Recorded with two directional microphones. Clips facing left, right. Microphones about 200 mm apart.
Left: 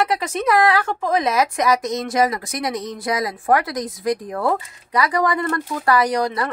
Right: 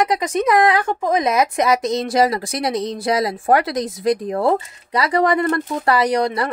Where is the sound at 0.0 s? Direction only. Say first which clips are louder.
Right 3 dB; 15° right (ahead or behind).